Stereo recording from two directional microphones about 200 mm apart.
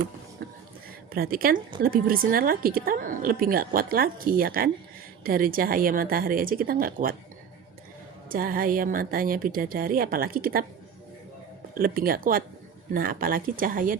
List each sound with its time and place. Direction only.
1.1 s a woman's voice: 50° right (ahead or behind)
8.3 s a woman's voice: 45° right (ahead or behind)
11.8 s a woman's voice: 45° right (ahead or behind)